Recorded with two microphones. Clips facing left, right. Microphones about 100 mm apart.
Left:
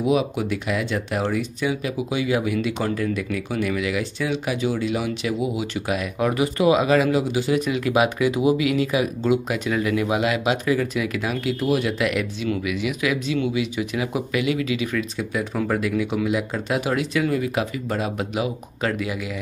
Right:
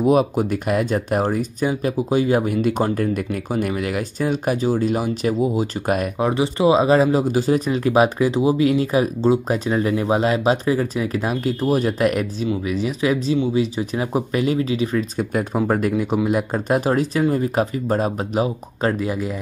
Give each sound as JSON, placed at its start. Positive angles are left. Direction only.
{"t": 0.0, "sound": "speech", "side_deg": -45}
{"t": 6.1, "sound": "speech", "side_deg": -25}